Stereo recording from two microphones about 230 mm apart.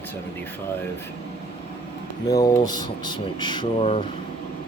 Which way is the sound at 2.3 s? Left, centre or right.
Centre.